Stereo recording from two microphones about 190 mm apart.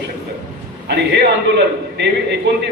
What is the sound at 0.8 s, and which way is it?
A man's voice, 60° right (ahead or behind).